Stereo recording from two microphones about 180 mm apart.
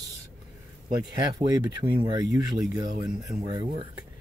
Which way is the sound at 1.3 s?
25° right (ahead or behind).